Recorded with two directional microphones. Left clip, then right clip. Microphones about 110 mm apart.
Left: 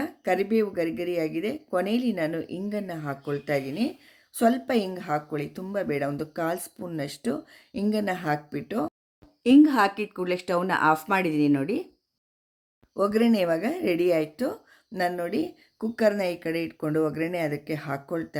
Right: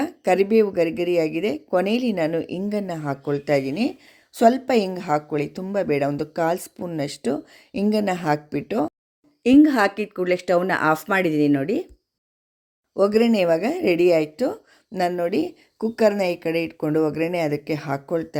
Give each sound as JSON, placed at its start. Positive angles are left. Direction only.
{"t": 0.0, "sound": "a woman's voice", "side_deg": -45}
{"t": 13.0, "sound": "a woman's voice", "side_deg": -30}